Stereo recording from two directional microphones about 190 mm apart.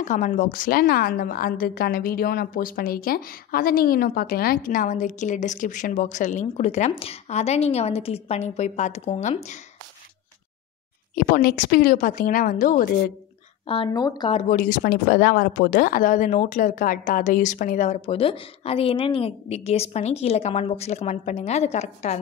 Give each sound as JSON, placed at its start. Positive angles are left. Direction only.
{"t": 0.0, "sound": "a woman's voice", "side_deg": 40}
{"t": 11.1, "sound": "a woman's voice", "side_deg": 50}
{"t": 13.7, "sound": "speech", "side_deg": 25}
{"t": 14.3, "sound": "speech", "side_deg": 45}